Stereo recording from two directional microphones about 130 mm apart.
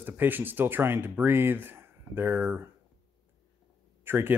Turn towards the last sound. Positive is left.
turn(degrees=-20)  # may be behind; listen again after turning